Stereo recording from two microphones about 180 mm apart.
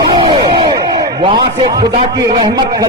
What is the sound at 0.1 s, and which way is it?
A man's voice, 25° right (ahead or behind).